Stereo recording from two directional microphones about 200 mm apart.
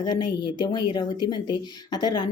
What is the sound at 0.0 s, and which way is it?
Speech, 20° left (ahead or behind).